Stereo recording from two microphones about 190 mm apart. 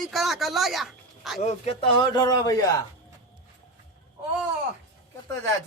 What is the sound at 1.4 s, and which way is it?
A man's voice, 35° left (ahead or behind).